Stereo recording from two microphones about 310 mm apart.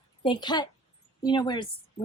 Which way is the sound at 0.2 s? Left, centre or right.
Centre.